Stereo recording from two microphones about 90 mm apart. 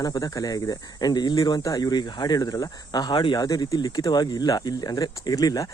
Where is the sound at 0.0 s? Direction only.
40° left (ahead or behind); by 3.3 s 60° left (ahead or behind).